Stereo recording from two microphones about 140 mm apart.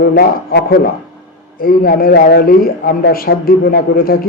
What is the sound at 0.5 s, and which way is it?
A man's voice, 90° left.